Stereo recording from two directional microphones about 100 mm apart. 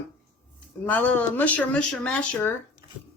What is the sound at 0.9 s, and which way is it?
Speech, 15° left (ahead or behind).